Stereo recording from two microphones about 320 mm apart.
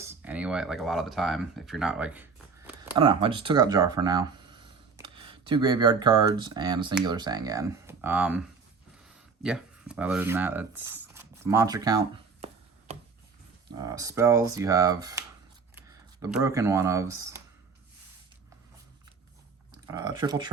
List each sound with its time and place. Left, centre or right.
0.0 s speech: centre
12.9 s a sound: centre
13.7 s speech: centre
19.9 s speech: centre